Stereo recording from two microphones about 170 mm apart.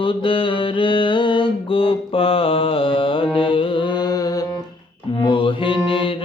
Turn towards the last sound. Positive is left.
turn(degrees=30)  # may be behind; listen again after turning